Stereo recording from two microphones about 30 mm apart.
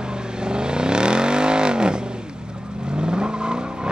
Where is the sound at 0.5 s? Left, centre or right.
Right.